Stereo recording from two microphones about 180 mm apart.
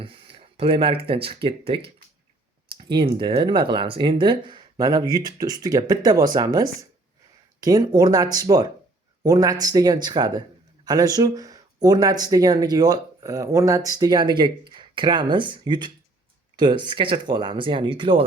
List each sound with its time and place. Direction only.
0.0 s speech: 30° right (ahead or behind)